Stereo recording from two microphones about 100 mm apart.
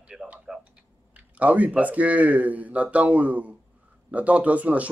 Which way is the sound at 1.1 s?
15° right (ahead or behind).